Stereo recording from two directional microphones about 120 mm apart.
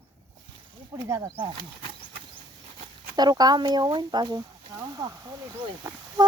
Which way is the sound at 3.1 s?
35° right (ahead or behind).